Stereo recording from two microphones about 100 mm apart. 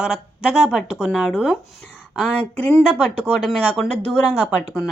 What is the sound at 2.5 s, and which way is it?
Speech, 15° left (ahead or behind).